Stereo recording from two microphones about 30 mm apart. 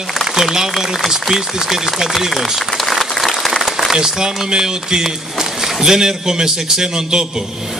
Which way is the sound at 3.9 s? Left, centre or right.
Right.